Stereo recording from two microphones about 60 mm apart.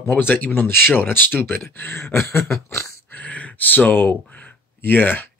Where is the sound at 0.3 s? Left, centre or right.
Left.